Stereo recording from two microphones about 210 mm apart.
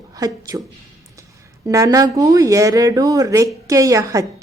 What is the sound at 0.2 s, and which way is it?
Speech, 15° right (ahead or behind).